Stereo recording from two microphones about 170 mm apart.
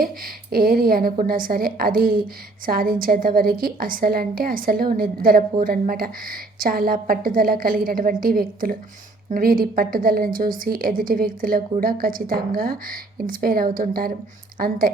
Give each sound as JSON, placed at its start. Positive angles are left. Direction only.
{"t": 0.0, "sound": "a woman's voice", "side_deg": -60}